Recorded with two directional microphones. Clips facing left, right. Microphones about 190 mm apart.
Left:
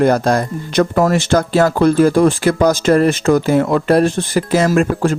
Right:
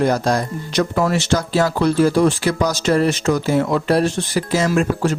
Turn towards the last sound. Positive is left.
turn(degrees=50)  # may be behind; listen again after turning